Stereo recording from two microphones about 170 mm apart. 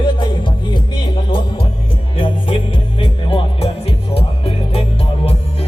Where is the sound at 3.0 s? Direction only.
35° left (ahead or behind).